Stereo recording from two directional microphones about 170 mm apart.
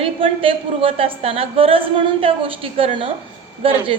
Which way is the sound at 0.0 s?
30° right (ahead or behind).